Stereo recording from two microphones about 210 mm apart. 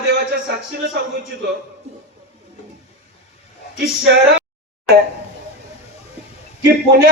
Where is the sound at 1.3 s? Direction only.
50° right (ahead or behind).